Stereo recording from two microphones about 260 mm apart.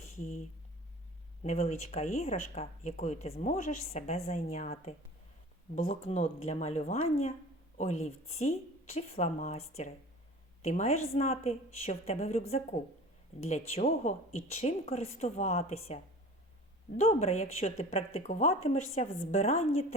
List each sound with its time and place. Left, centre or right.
1.5 s a woman's voice: left